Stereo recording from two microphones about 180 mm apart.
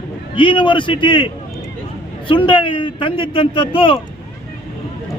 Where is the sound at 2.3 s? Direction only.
25° left (ahead or behind).